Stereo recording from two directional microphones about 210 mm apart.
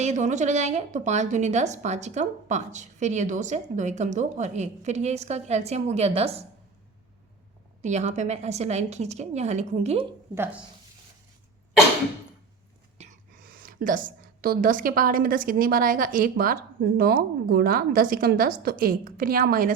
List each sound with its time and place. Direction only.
0.0 s a woman's voice: 35° right (ahead or behind)
7.8 s a woman's voice: 35° right (ahead or behind)
10.3 s speech: 10° right (ahead or behind)
13.0 s a woman's voice: 40° right (ahead or behind)